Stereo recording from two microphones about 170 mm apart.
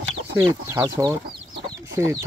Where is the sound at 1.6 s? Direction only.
20° right (ahead or behind).